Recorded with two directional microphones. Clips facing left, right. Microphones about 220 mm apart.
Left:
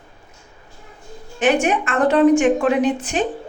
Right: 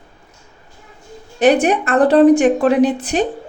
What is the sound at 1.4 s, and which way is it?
A woman's voice, 35° right (ahead or behind).